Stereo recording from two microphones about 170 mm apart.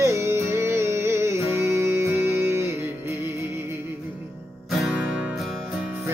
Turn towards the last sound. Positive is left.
turn(degrees=-5)  # may be behind; listen again after turning